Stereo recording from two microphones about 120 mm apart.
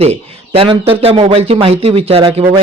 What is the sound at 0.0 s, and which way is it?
Speech, 55° right (ahead or behind).